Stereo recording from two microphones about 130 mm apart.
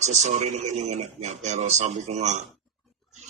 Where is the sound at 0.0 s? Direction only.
60° right (ahead or behind).